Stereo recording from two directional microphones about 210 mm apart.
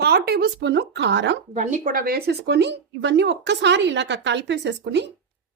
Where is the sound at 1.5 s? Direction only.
35° right (ahead or behind); by 5.0 s 55° right (ahead or behind).